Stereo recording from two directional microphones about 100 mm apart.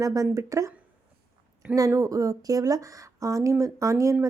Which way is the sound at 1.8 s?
35° right (ahead or behind).